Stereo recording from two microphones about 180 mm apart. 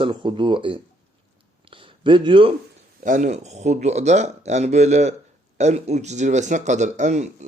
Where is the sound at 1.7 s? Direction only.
30° right (ahead or behind).